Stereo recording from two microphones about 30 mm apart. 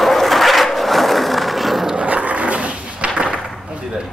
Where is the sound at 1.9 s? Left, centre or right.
Right.